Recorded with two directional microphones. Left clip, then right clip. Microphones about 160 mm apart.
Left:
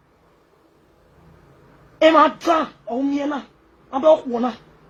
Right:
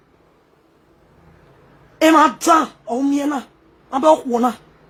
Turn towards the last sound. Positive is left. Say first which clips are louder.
# right 2 dB
turn(degrees=-35)  # may be behind; listen again after turning